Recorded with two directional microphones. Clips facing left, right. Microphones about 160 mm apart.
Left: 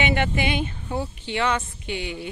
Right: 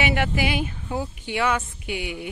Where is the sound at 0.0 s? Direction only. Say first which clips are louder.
Even; 5° right (ahead or behind).